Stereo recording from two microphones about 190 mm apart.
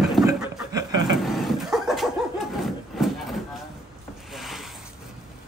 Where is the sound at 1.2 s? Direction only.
Centre (ahead or behind).